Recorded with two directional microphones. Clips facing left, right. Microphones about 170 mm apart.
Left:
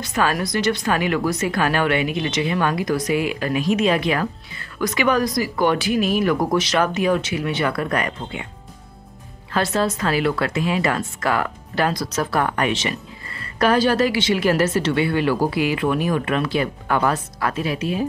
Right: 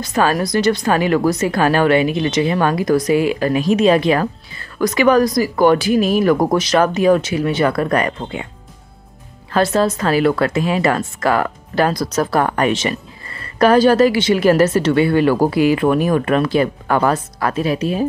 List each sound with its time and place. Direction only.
0.0 s speech: 35° right (ahead or behind)
9.5 s speech: 40° right (ahead or behind)